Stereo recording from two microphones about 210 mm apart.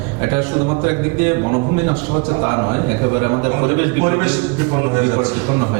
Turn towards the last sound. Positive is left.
turn(degrees=-20)  # may be behind; listen again after turning